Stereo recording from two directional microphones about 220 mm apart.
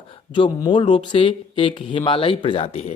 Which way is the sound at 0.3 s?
20° left (ahead or behind).